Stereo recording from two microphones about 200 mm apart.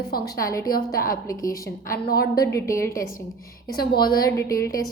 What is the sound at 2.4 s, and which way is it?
Speech, 15° left (ahead or behind).